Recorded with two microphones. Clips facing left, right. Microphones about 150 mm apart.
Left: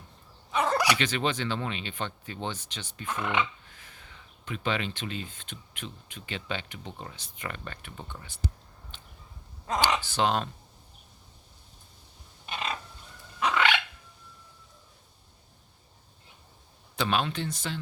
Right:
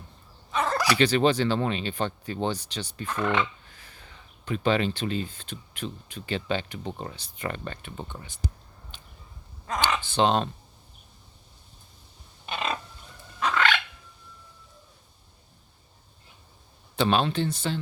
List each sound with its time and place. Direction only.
0.5 s dog: 15° left (ahead or behind)
0.9 s speech: 35° right (ahead or behind)
3.1 s speech: 10° left (ahead or behind)
3.7 s speech: 35° right (ahead or behind); by 8.4 s 20° right (ahead or behind)
8.9 s a sound: 15° right (ahead or behind)
9.7 s speech: 25° left (ahead or behind)
10.0 s speech: 25° right (ahead or behind)
13.4 s a sound: 15° left (ahead or behind)
17.0 s speech: 30° right (ahead or behind)